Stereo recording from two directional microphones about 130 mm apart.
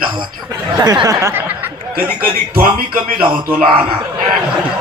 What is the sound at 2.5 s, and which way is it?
Music, 90° right.